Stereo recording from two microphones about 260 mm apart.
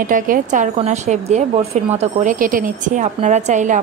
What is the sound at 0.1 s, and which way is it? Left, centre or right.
Speech, right.